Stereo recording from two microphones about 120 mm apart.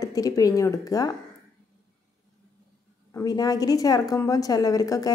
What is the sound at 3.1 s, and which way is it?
Speech, 30° left (ahead or behind).